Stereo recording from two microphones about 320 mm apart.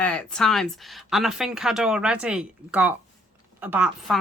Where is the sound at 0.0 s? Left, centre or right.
Centre.